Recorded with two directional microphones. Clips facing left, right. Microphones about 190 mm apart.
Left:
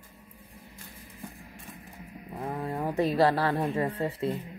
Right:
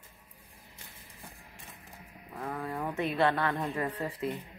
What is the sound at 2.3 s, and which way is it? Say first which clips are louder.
Speech: left 3 dB; 25° left (ahead or behind).